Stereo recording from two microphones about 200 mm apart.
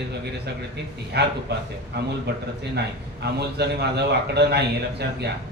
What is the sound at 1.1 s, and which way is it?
Speech, 55° right (ahead or behind).